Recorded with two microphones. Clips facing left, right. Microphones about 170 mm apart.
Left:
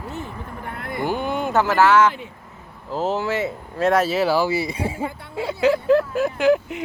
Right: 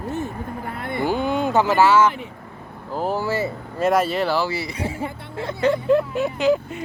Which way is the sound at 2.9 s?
25° left (ahead or behind).